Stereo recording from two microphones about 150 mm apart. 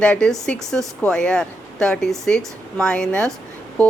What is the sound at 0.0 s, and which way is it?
A woman's voice, 5° left (ahead or behind).